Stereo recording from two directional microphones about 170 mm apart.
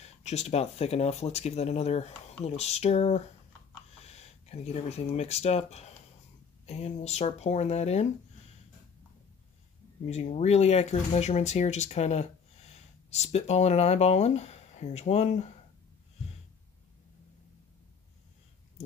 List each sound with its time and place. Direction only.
0.2 s speech: 40° left (ahead or behind)
10.0 s speech: 40° left (ahead or behind)